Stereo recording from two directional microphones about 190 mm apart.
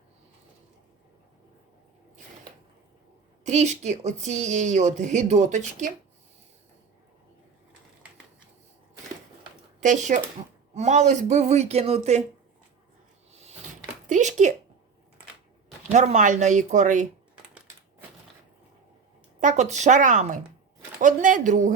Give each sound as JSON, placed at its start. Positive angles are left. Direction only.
{"t": 3.4, "sound": "speech", "side_deg": -35}
{"t": 9.8, "sound": "speech", "side_deg": -40}
{"t": 14.1, "sound": "a sound", "side_deg": -40}
{"t": 15.9, "sound": "speech", "side_deg": -40}
{"t": 19.4, "sound": "speech", "side_deg": -40}